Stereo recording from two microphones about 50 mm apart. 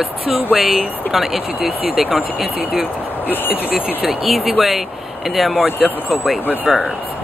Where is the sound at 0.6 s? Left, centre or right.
Centre.